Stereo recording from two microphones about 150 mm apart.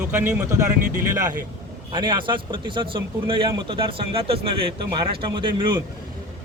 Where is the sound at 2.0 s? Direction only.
30° right (ahead or behind).